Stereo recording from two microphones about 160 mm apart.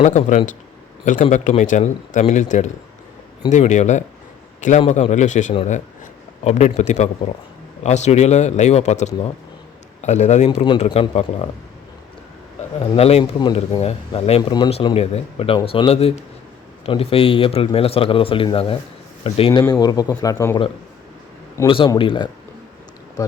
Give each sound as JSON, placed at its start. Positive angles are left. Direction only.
{"t": 0.0, "sound": "a man's voice", "side_deg": 45}
{"t": 10.8, "sound": "speech", "side_deg": 35}
{"t": 12.8, "sound": "speech", "side_deg": 40}
{"t": 21.7, "sound": "speech", "side_deg": 35}